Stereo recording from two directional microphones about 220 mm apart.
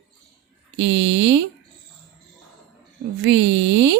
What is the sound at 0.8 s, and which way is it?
Speech, 55° right (ahead or behind).